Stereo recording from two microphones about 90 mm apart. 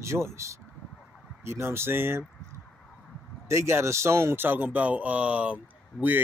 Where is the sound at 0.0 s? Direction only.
30° right (ahead or behind).